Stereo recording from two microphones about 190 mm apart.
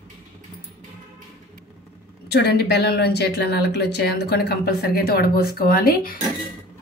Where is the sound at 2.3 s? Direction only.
60° left (ahead or behind).